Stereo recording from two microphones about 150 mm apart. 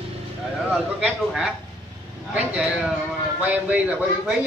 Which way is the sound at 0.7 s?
Centre (ahead or behind).